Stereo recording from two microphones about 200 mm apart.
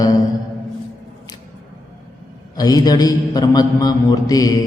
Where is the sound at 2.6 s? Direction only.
20° left (ahead or behind).